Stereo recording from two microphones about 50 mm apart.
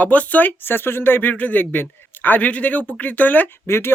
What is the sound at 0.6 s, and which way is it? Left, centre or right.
Speech, left.